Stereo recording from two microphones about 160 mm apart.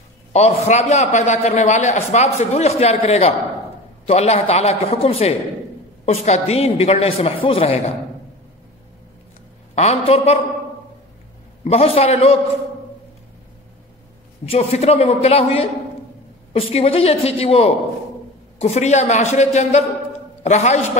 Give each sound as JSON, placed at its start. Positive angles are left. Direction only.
{"t": 0.3, "sound": "a man's voice", "side_deg": 45}
{"t": 9.8, "sound": "a woman's voice", "side_deg": 40}
{"t": 11.6, "sound": "a woman's voice", "side_deg": 40}
{"t": 14.5, "sound": "a woman's voice", "side_deg": 40}